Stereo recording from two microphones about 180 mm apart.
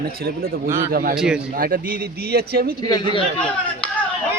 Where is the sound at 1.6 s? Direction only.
50° right (ahead or behind).